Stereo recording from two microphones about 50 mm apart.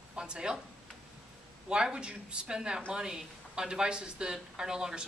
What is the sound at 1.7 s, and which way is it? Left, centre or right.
Speech, centre.